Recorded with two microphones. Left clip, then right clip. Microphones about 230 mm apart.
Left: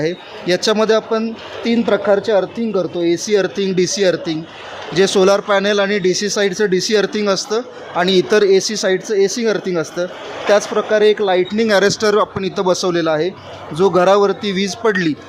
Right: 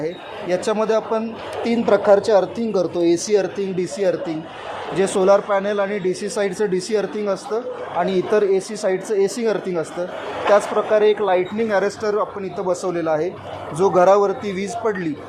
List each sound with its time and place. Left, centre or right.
0.0 s speech: left
12.4 s speech: left